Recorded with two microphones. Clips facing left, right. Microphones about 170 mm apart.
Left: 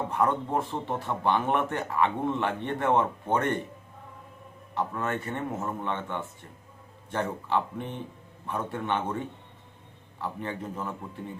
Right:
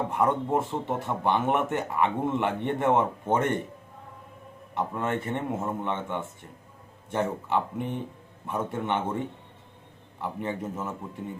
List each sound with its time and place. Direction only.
0.1 s speech: 20° right (ahead or behind)
4.8 s speech: 20° right (ahead or behind)
10.6 s speech: 5° right (ahead or behind)